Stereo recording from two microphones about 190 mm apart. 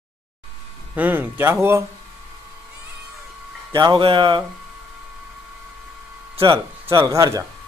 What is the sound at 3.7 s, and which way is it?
Speech, 25° right (ahead or behind).